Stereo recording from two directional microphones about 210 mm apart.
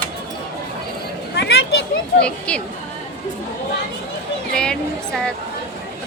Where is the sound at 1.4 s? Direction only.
55° left (ahead or behind).